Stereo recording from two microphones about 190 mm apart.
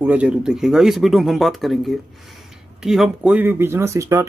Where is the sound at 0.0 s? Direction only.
10° right (ahead or behind).